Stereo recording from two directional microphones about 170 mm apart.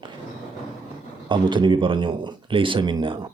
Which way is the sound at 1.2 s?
25° right (ahead or behind).